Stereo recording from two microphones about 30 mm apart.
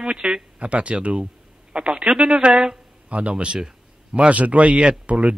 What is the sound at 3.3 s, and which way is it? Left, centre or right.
Speech, right.